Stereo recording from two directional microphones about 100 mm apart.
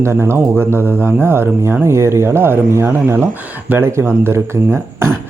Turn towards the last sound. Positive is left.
turn(degrees=-25)  # may be behind; listen again after turning